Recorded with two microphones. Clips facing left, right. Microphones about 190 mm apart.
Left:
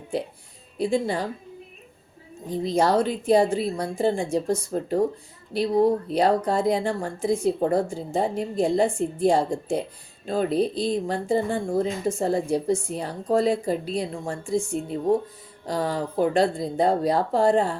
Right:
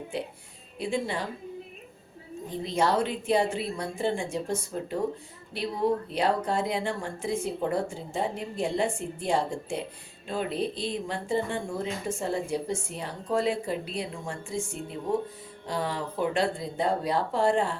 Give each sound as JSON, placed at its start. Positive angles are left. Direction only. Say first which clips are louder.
{"t": 0.1, "sound": "speech", "louder": "left 8 dB", "side_deg": 40}
{"t": 2.5, "sound": "speech", "louder": "left 5 dB", "side_deg": 40}